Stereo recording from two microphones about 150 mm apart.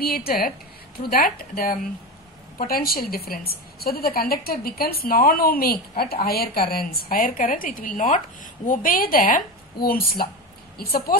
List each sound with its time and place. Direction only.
0.0 s a woman's voice: 85° left